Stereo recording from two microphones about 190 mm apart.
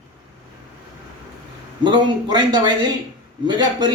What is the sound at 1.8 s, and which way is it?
Speech, 25° right (ahead or behind).